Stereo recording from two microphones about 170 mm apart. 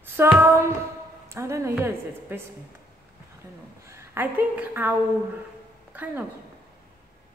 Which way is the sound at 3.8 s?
15° right (ahead or behind).